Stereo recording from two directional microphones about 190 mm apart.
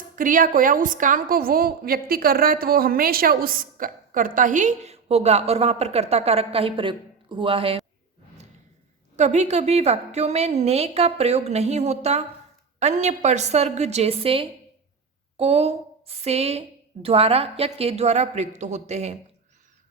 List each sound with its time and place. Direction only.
0.2 s a woman's voice: 45° right (ahead or behind); by 7.8 s 30° right (ahead or behind)
9.1 s a woman's voice: 35° right (ahead or behind)